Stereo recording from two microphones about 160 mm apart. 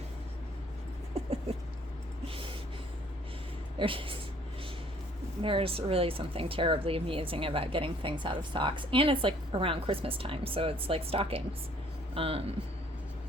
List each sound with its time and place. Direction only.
1.2 s a sound: 40° right (ahead or behind)
3.8 s speech: 35° right (ahead or behind)
5.4 s speech: 35° right (ahead or behind)